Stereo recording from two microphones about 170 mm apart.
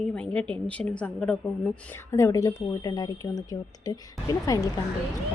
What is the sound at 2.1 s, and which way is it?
Speech, 15° left (ahead or behind).